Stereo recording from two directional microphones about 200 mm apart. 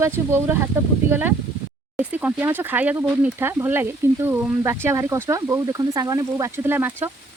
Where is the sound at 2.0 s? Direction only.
5° right (ahead or behind).